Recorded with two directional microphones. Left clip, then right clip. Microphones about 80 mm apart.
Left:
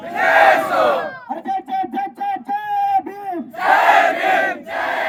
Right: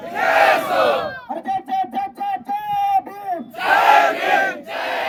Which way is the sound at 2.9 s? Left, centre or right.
Right.